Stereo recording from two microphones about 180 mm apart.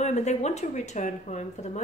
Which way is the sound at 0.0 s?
40° left (ahead or behind).